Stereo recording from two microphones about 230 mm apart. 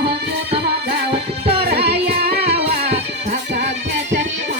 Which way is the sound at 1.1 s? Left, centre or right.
Right.